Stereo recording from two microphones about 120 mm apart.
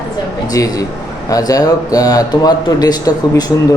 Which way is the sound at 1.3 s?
30° left (ahead or behind).